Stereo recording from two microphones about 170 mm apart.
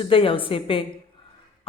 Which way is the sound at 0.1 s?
30° left (ahead or behind).